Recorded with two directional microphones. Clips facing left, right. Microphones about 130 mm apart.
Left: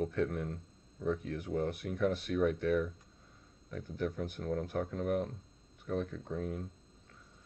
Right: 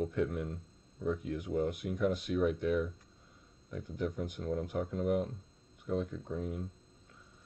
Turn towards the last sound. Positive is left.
turn(degrees=-10)  # may be behind; listen again after turning